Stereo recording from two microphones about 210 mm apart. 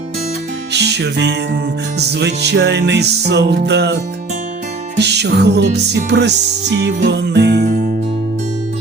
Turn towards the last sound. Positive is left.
turn(degrees=-40)  # may be behind; listen again after turning